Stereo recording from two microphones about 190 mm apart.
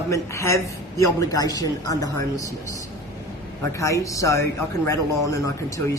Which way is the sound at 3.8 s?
15° left (ahead or behind).